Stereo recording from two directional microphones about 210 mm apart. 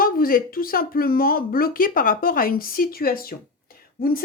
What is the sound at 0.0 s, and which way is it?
A woman's voice, 45° left (ahead or behind).